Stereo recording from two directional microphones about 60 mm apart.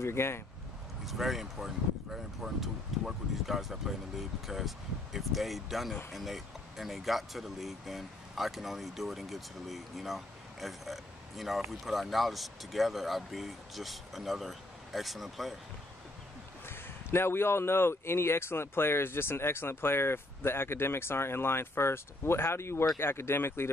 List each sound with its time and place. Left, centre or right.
0.0 s speech: left
1.0 s speech: centre
16.6 s speech: left